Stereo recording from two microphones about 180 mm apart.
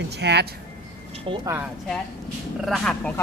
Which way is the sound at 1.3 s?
30° right (ahead or behind).